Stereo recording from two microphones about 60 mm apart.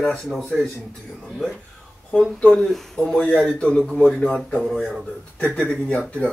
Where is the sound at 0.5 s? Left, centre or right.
Centre.